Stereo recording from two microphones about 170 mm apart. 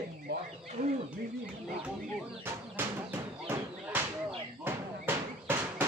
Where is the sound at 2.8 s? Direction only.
10° right (ahead or behind).